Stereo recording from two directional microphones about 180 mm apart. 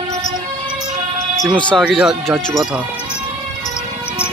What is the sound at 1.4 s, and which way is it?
Speech, 5° left (ahead or behind).